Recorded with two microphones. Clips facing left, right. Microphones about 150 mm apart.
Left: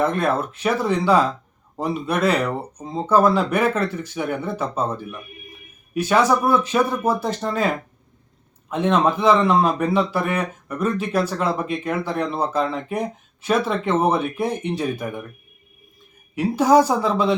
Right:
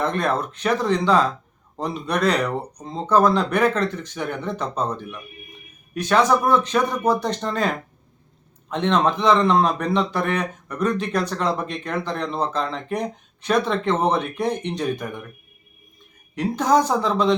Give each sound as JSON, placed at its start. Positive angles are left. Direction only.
{"t": 0.0, "sound": "a man's voice", "side_deg": 5}
{"t": 16.3, "sound": "a man's voice", "side_deg": 10}